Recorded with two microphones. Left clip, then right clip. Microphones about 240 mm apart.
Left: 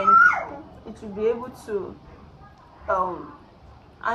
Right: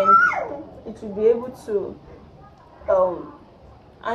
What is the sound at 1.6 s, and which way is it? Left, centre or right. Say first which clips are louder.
Speech: right 4 dB; centre.